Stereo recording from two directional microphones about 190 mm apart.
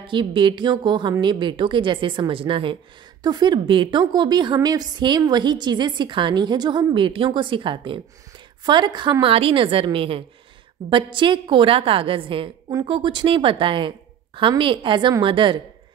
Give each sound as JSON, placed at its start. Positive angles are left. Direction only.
{"t": 0.0, "sound": "a woman's voice", "side_deg": -25}